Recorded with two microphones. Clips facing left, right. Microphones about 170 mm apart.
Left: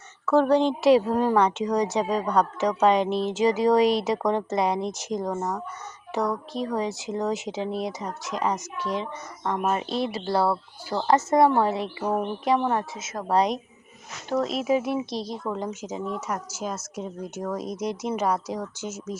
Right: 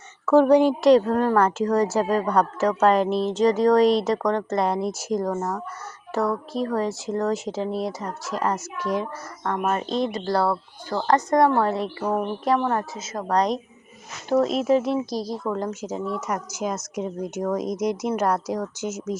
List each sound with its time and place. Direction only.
0.3 s speech: 15° right (ahead or behind)
0.8 s speech: 5° left (ahead or behind)
1.4 s a woman's voice: centre (ahead or behind)
5.3 s speech: 10° left (ahead or behind)
6.1 s a woman's voice: centre (ahead or behind)
9.6 s a woman's voice: 5° left (ahead or behind)
12.5 s a woman's voice: 10° left (ahead or behind)
15.1 s speech: 25° left (ahead or behind)
15.4 s speech: 10° left (ahead or behind)
16.5 s speech: 15° right (ahead or behind)